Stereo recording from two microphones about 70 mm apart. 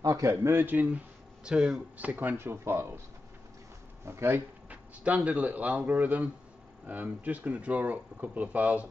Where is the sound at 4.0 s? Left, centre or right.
Right.